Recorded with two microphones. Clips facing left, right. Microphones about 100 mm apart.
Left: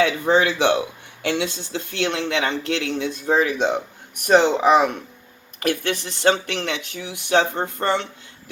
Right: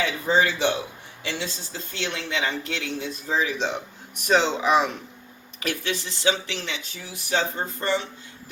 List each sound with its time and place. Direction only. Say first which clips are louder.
0.0 s speech: left 4 dB; 65° left (ahead or behind)